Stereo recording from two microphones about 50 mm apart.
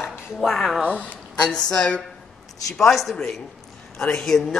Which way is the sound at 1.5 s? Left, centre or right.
Centre.